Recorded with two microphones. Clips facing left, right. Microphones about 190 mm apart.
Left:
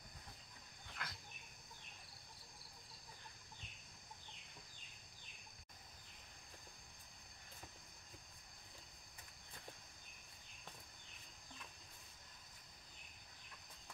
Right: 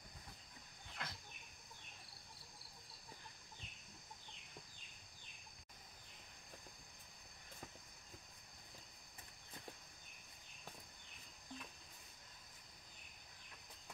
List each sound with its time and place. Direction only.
1.0 s chicken: 25° right (ahead or behind)